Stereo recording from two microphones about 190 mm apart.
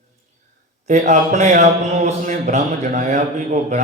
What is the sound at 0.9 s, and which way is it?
Speech, 40° right (ahead or behind).